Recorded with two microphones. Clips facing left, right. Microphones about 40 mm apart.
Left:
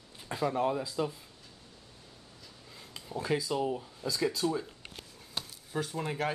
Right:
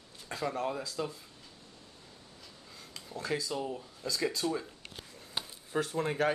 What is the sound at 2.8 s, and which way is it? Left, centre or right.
Speech, centre.